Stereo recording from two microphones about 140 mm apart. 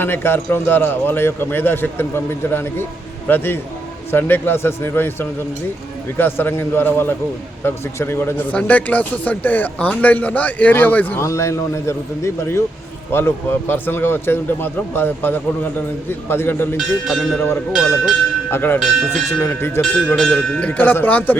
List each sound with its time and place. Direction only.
0.0 s a man's voice: 15° left (ahead or behind)
16.7 s speech: centre (ahead or behind)
18.5 s a man's voice: 15° left (ahead or behind)
18.8 s speech: centre (ahead or behind)
19.4 s a man's voice: 15° left (ahead or behind)
20.1 s a man's voice: 5° left (ahead or behind)